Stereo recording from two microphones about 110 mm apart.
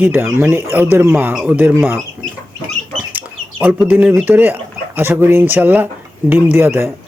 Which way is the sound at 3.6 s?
15° right (ahead or behind).